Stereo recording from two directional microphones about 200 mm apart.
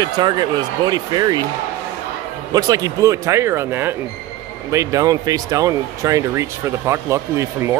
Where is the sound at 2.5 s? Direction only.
20° right (ahead or behind).